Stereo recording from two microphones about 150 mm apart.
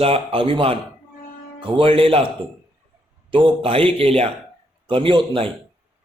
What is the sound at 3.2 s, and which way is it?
A man's voice, 35° right (ahead or behind).